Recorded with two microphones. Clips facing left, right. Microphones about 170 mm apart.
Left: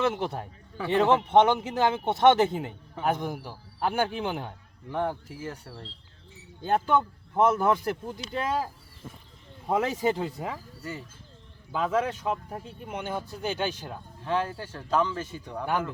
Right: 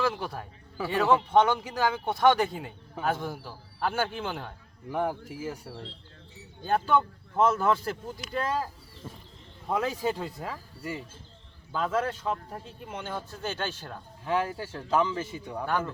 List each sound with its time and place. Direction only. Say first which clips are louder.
0.0 s speech: left 2 dB; 25° left (ahead or behind)
4.9 s speech: even; 10° right (ahead or behind)
6.6 s speech: left 1 dB; 20° left (ahead or behind)
11.7 s speech: left 2 dB; 10° left (ahead or behind)
14.3 s speech: even; 10° right (ahead or behind)